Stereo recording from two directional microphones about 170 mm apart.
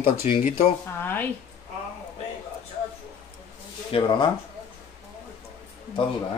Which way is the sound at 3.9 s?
30° left (ahead or behind).